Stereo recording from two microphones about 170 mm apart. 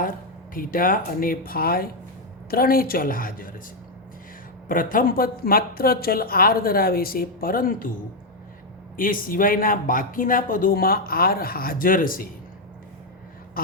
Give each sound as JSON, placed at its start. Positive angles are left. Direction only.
{"t": 0.5, "sound": "speech", "side_deg": 55}
{"t": 4.7, "sound": "speech", "side_deg": 55}
{"t": 9.0, "sound": "speech", "side_deg": 55}